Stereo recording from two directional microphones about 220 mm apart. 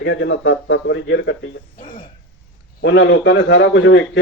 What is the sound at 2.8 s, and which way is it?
Speech, 55° left (ahead or behind).